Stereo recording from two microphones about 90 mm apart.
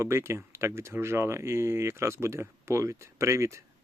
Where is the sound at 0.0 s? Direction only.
30° right (ahead or behind).